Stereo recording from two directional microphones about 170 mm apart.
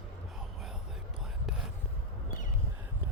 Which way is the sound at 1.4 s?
5° right (ahead or behind).